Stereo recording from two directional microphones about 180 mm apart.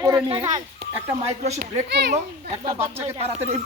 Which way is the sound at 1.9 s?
70° right (ahead or behind).